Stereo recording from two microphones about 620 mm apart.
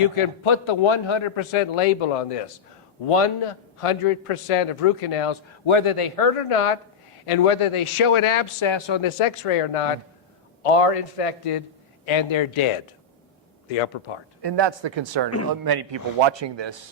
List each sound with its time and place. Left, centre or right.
0.0 s a man's voice: left
12.0 s a man's voice: left
13.7 s a man's voice: left
14.4 s a man's voice: right